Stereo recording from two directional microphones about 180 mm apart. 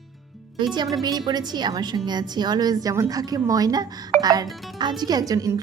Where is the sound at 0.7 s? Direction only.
25° right (ahead or behind).